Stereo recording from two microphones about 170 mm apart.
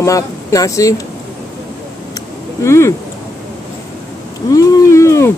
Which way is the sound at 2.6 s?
15° left (ahead or behind).